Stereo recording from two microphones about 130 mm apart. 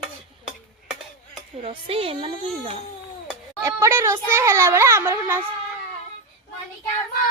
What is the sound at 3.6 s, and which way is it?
A child's voice, 20° right (ahead or behind).